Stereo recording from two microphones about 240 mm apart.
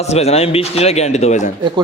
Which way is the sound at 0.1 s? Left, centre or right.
Left.